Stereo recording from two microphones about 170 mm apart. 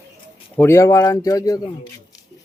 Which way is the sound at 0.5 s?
15° left (ahead or behind).